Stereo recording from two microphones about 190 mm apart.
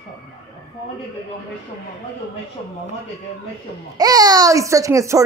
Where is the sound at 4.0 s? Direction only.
20° right (ahead or behind).